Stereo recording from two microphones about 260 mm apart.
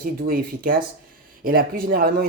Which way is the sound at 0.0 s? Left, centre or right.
Right.